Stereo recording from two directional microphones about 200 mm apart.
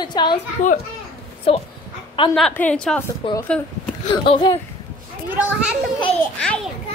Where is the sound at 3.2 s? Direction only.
25° left (ahead or behind).